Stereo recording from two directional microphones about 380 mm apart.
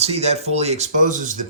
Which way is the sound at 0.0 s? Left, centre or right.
Centre.